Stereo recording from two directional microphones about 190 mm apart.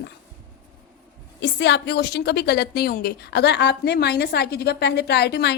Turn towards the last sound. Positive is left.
turn(degrees=60)  # may be behind; listen again after turning